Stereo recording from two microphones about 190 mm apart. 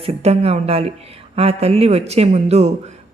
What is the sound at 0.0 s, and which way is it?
Speech, 30° right (ahead or behind).